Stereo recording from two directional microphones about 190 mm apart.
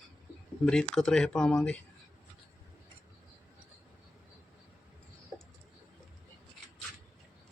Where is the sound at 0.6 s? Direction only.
5° left (ahead or behind).